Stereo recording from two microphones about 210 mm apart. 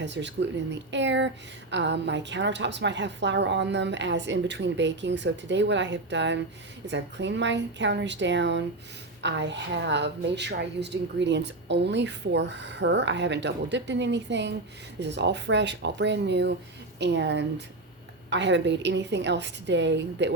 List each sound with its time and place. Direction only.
0.0 s a woman's voice: 55° right (ahead or behind)